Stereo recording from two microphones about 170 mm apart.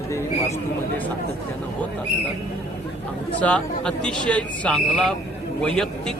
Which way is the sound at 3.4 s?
5° left (ahead or behind).